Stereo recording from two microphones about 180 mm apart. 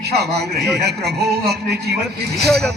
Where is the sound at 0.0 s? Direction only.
65° right (ahead or behind).